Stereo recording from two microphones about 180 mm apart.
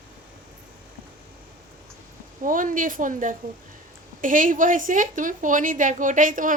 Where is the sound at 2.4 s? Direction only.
45° right (ahead or behind).